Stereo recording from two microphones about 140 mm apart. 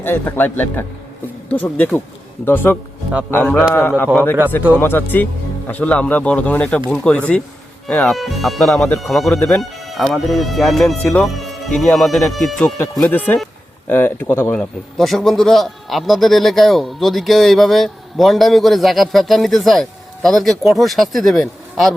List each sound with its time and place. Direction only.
0.0 s a man's voice: 15° left (ahead or behind)
14.5 s a man's voice: 5° left (ahead or behind)